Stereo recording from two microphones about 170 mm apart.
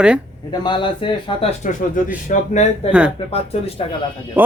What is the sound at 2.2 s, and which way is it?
Speech, 45° left (ahead or behind).